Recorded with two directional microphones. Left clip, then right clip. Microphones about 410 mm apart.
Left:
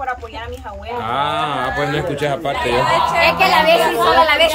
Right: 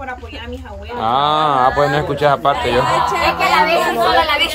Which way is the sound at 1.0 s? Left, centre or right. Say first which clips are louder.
Right 5 dB; centre.